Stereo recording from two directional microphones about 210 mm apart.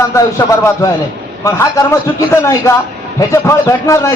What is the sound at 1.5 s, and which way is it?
A man's voice, 15° left (ahead or behind).